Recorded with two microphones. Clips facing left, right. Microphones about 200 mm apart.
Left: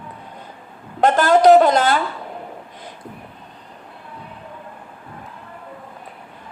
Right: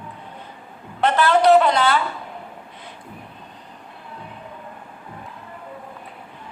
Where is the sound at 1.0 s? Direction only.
40° left (ahead or behind).